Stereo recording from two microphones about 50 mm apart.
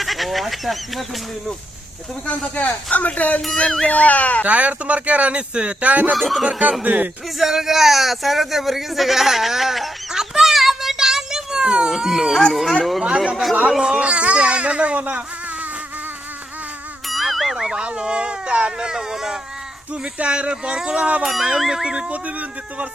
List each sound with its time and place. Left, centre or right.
0.0 s speech: centre
2.2 s speech: left
4.4 s speech: right
6.1 s speech: centre
6.8 s speech: right
7.3 s a man's voice: centre
13.3 s speech: centre
13.7 s speech: centre
17.1 s a sound: centre
17.8 s speech: centre
20.1 s speech: right
21.2 s speech: centre
22.1 s speech: right